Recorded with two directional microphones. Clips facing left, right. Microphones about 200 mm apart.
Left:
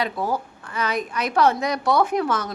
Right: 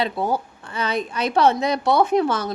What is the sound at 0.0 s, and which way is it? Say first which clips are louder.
A woman's voice: right 2 dB; 25° right (ahead or behind).